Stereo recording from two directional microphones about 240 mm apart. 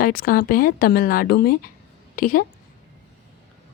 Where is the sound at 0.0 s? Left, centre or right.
Left.